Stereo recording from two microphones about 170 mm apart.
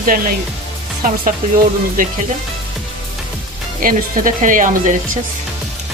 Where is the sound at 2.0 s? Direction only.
55° right (ahead or behind).